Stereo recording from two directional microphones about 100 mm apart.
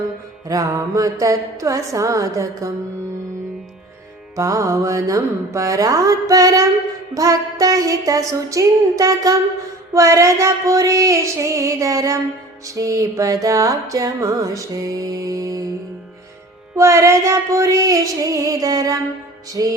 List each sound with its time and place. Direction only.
0.4 s music: 35° right (ahead or behind)
4.4 s music: 35° right (ahead or behind)
16.7 s music: 30° right (ahead or behind)